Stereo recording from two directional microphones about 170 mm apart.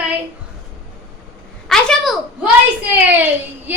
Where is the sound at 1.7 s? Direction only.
Centre (ahead or behind).